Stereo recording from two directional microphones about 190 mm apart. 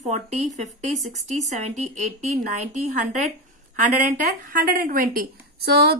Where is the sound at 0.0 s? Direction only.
35° right (ahead or behind).